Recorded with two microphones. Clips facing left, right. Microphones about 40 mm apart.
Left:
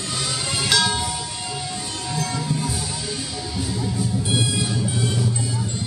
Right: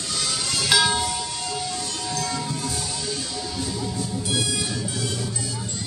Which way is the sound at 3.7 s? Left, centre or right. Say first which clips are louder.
Left 3 dB; centre.